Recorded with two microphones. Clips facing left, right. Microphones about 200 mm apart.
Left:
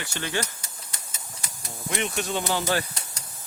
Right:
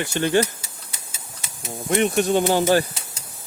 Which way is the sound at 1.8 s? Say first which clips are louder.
Right 10 dB; 50° right (ahead or behind).